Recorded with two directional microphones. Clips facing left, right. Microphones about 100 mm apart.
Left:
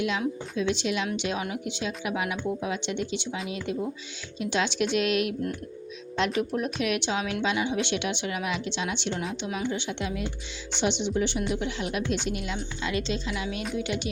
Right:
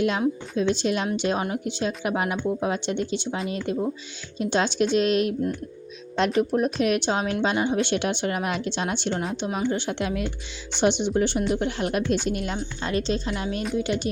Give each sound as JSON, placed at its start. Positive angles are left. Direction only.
{"t": 0.0, "sound": "a woman's voice", "side_deg": -45}